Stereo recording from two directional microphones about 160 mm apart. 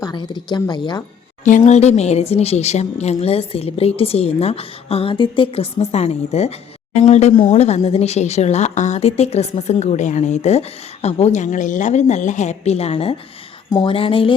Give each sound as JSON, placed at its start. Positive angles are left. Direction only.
{"t": 0.0, "sound": "speech", "side_deg": 25}
{"t": 1.5, "sound": "speech", "side_deg": 50}
{"t": 13.7, "sound": "speech", "side_deg": 25}
{"t": 13.9, "sound": "speech", "side_deg": 35}